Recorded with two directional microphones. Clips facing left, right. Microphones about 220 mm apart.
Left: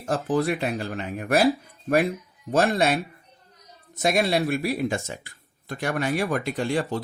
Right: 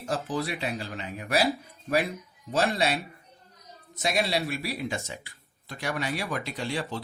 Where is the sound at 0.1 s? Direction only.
50° left (ahead or behind).